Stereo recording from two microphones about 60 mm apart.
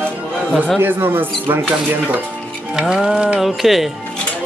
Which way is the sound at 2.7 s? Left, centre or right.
Centre.